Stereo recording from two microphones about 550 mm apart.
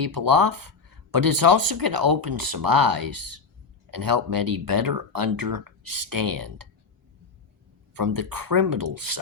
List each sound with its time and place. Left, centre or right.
0.0 s speech: right
7.9 s speech: right